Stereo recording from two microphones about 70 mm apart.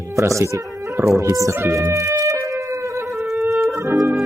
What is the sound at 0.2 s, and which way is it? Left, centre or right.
Speech, right.